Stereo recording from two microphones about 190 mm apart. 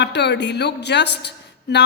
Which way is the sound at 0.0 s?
65° left (ahead or behind).